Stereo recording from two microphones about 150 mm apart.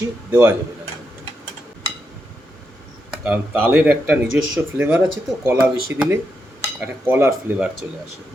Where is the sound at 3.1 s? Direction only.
10° right (ahead or behind).